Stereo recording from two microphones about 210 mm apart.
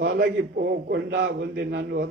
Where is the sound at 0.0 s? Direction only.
50° right (ahead or behind).